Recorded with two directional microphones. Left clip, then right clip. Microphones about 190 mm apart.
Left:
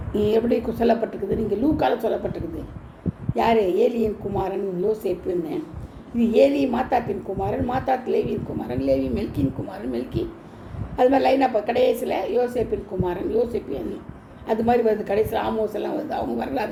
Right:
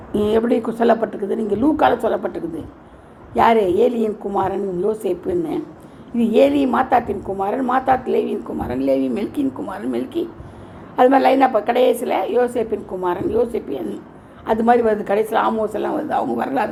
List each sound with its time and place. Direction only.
0.1 s a woman's voice: 30° right (ahead or behind)